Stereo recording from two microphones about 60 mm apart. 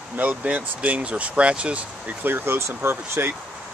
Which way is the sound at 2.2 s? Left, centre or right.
Right.